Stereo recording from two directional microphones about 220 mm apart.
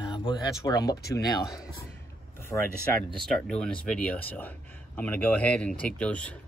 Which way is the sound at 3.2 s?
5° left (ahead or behind).